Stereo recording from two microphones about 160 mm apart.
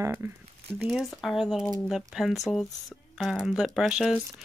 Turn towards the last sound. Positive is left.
turn(degrees=-5)  # may be behind; listen again after turning